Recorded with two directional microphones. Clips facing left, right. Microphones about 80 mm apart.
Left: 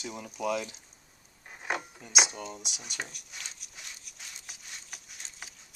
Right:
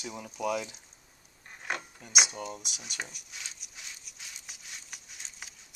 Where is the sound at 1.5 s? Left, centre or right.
Centre.